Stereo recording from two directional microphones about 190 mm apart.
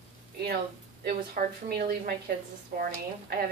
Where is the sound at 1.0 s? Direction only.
50° right (ahead or behind).